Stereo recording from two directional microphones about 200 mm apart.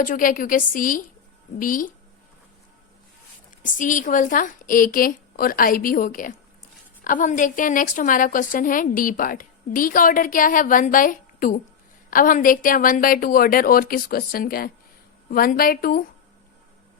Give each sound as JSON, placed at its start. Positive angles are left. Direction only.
{"t": 0.0, "sound": "a woman's voice", "side_deg": 45}
{"t": 3.6, "sound": "a woman's voice", "side_deg": 40}